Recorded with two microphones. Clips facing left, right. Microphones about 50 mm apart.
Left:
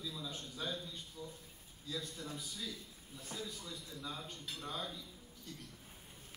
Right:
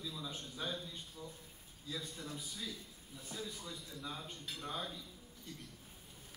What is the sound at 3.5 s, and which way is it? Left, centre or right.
Speech, right.